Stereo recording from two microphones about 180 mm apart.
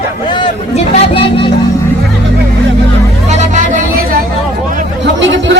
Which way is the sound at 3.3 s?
45° right (ahead or behind).